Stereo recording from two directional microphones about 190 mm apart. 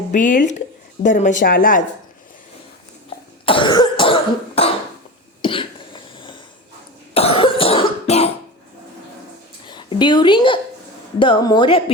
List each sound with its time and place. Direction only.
0.1 s speech: 45° left (ahead or behind)
3.4 s cough: 25° left (ahead or behind)
9.6 s a woman's voice: 25° left (ahead or behind)